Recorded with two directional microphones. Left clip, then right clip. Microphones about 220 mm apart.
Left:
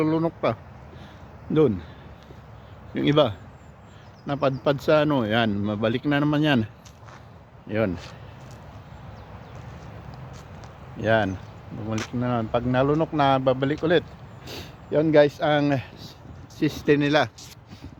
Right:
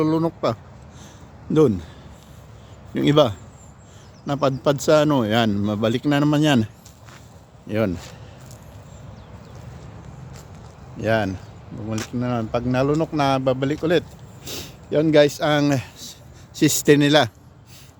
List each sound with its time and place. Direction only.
0.0 s speech: 20° right (ahead or behind)
1.5 s speech: 25° right (ahead or behind)
2.9 s speech: 30° right (ahead or behind)
7.7 s speech: 20° right (ahead or behind)
11.0 s speech: 5° right (ahead or behind)
14.4 s speech: 20° right (ahead or behind); by 16.1 s 35° right (ahead or behind)
16.6 s speech: 65° right (ahead or behind)